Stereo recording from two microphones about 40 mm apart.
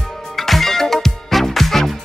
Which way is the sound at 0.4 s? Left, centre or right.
Centre.